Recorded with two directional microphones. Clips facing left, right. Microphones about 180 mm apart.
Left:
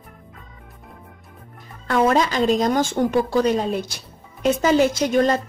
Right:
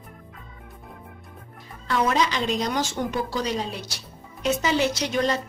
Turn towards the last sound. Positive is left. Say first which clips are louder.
# left 6 dB
turn(degrees=50)  # may be behind; listen again after turning